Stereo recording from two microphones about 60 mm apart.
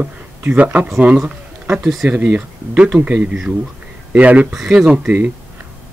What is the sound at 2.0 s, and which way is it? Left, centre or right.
Speech, right.